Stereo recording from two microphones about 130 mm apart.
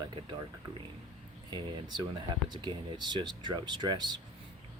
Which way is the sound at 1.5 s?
30° right (ahead or behind).